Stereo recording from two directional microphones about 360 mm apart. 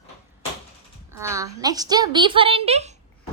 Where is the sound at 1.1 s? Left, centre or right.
Centre.